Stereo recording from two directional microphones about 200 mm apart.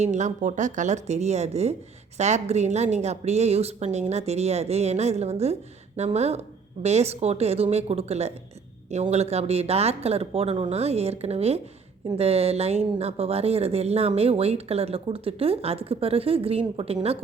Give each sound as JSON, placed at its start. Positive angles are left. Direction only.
{"t": 0.0, "sound": "a woman's voice", "side_deg": -35}